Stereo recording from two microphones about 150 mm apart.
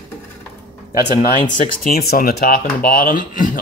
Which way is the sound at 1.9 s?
75° left (ahead or behind).